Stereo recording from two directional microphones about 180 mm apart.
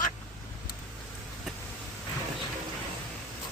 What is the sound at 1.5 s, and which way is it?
Vehicle, centre (ahead or behind).